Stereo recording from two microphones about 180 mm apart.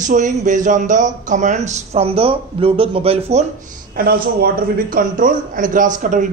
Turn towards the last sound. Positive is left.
turn(degrees=-45)  # may be behind; listen again after turning